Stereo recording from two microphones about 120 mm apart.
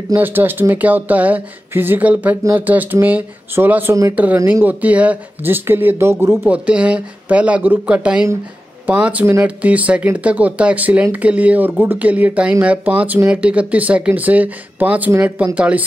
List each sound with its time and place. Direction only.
0.1 s speech: 15° right (ahead or behind)
6.5 s speech: 10° right (ahead or behind)
9.2 s speech: 20° right (ahead or behind)
9.6 s speech: 10° right (ahead or behind)